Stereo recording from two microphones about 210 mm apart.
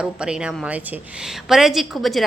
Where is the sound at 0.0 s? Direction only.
5° right (ahead or behind).